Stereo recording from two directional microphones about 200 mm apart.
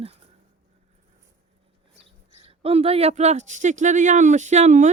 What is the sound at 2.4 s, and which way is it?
Speech, 30° right (ahead or behind).